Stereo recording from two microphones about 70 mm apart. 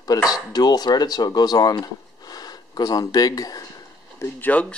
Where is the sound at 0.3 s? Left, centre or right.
Left.